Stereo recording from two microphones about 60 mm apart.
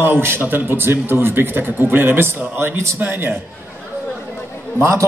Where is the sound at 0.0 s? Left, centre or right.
Right.